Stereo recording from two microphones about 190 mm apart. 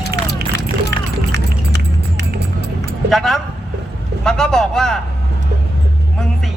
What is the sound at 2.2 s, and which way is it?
Music, 60° right (ahead or behind).